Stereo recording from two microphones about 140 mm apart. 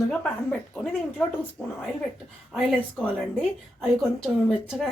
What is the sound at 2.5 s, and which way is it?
Speech, 5° left (ahead or behind).